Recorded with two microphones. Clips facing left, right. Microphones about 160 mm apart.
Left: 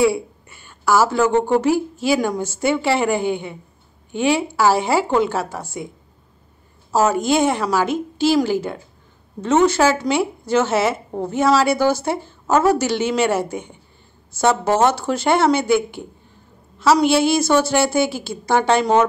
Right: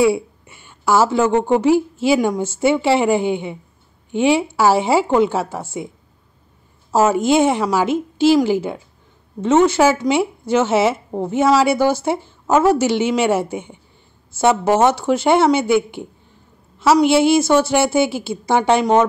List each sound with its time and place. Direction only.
0.0 s a woman's voice: 20° right (ahead or behind)
7.2 s a woman's voice: 20° right (ahead or behind)